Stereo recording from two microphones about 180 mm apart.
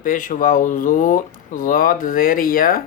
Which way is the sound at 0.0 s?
45° left (ahead or behind).